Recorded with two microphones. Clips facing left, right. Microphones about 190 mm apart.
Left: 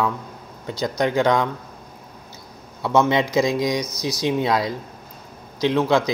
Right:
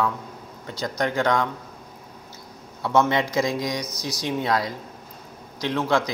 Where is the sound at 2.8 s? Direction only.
15° left (ahead or behind).